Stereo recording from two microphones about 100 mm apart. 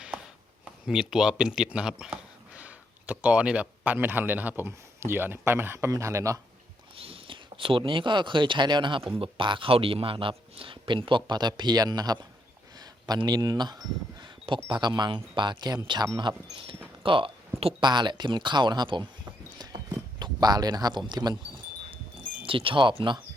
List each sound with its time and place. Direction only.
0.6 s speech: 5° right (ahead or behind); by 6.4 s 30° right (ahead or behind)
6.9 s speech: 65° right (ahead or behind); by 16.0 s 45° right (ahead or behind)
16.1 s speech: 55° right (ahead or behind)
17.8 s speech: 50° right (ahead or behind)
20.1 s speech: 45° right (ahead or behind)
22.4 s speech: 60° right (ahead or behind)